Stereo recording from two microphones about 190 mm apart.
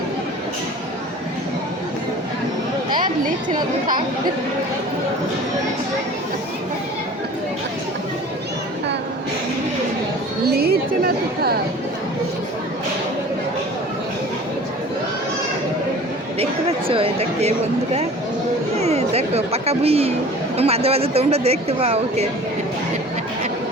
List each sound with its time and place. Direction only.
10.5 s a woman's voice: 55° right (ahead or behind)
16.4 s chatter: 30° right (ahead or behind)
18.8 s a sound: 35° right (ahead or behind)
20.6 s a woman's voice: 30° right (ahead or behind)